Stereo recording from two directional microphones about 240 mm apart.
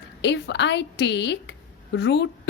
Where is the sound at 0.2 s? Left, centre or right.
Left.